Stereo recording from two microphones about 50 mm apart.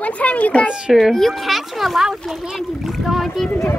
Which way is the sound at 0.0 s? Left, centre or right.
Left.